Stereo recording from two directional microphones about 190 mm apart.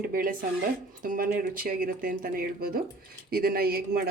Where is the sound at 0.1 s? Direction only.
50° right (ahead or behind).